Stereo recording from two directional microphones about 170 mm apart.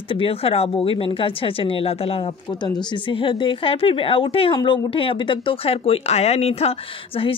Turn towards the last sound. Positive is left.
turn(degrees=35)  # may be behind; listen again after turning